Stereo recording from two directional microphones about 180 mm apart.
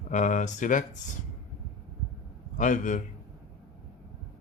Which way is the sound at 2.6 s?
45° left (ahead or behind).